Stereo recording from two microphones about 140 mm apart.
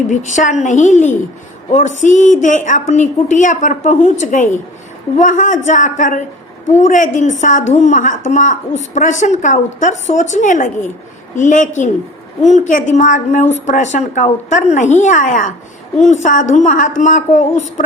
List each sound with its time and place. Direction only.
0.1 s a woman's voice: 60° left (ahead or behind)